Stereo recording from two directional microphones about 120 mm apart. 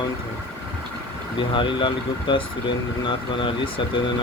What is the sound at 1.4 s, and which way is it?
Speech, 45° left (ahead or behind).